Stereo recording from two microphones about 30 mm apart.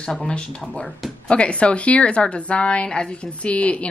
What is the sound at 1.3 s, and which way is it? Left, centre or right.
Speech, left.